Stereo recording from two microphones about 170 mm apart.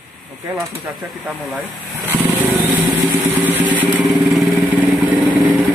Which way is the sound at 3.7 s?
5° right (ahead or behind).